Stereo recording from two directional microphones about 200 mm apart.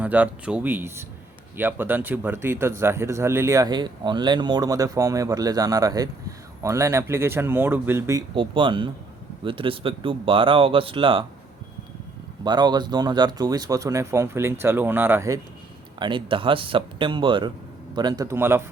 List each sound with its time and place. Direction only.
0.0 s speech: 5° right (ahead or behind)
8.4 s speech: 25° right (ahead or behind)
12.5 s speech: 20° right (ahead or behind)
16.0 s speech: 25° right (ahead or behind)